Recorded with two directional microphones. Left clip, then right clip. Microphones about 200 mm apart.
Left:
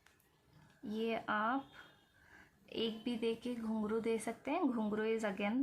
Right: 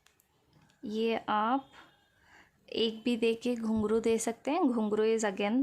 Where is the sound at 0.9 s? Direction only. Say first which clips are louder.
Right 7 dB; 55° right (ahead or behind).